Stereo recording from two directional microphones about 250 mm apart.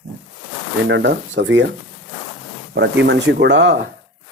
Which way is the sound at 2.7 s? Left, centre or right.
Right.